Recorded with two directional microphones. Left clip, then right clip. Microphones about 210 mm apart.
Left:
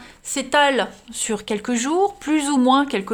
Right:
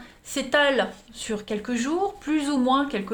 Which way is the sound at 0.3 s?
35° left (ahead or behind).